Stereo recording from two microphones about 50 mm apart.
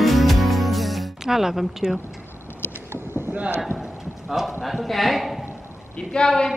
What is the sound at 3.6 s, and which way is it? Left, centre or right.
Speech, centre.